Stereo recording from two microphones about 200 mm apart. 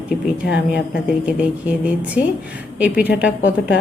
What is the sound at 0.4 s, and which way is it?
Speech, 60° left (ahead or behind).